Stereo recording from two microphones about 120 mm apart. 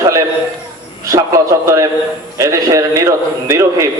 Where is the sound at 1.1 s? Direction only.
25° right (ahead or behind).